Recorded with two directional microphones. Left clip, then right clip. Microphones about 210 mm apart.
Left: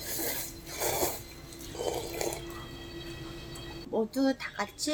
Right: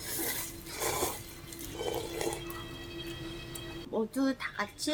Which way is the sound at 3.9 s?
5° left (ahead or behind).